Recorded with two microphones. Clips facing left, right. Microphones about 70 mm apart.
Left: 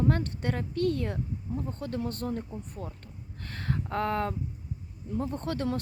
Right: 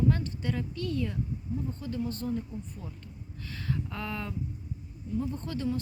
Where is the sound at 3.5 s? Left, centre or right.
Left.